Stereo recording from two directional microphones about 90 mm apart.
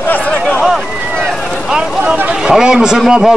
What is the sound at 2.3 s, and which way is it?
A man's voice, 5° right (ahead or behind).